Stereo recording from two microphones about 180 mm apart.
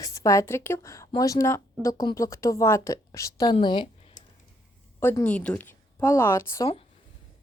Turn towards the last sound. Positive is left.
turn(degrees=15)  # may be behind; listen again after turning